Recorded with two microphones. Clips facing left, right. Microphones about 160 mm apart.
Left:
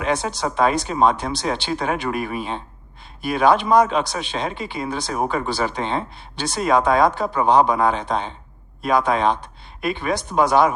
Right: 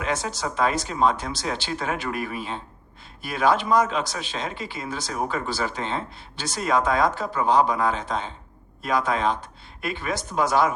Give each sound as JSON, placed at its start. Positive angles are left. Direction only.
{"t": 0.0, "sound": "speech", "side_deg": 20}